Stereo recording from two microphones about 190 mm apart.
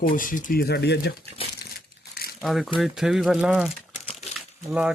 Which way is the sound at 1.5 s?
55° left (ahead or behind).